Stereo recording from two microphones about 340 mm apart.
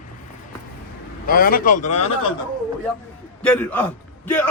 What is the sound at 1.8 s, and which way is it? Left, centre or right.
Speech, left.